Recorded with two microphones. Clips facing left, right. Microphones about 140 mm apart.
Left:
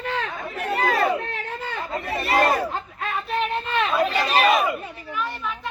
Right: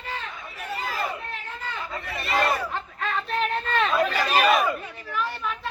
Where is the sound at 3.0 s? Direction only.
5° left (ahead or behind).